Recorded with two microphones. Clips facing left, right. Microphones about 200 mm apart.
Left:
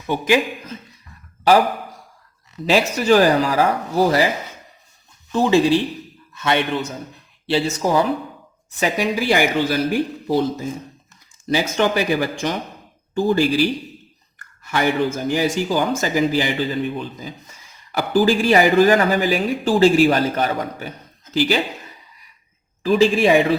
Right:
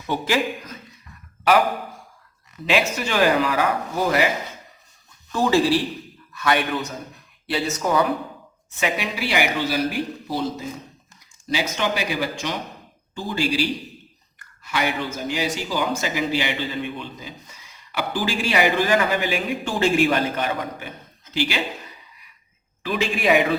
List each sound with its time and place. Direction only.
0.1 s speech: 20° left (ahead or behind)
2.6 s speech: 35° left (ahead or behind)
5.3 s speech: 20° left (ahead or behind)
8.8 s a man's voice: 45° left (ahead or behind)
11.4 s a man's voice: 50° left (ahead or behind)
22.8 s speech: 35° left (ahead or behind)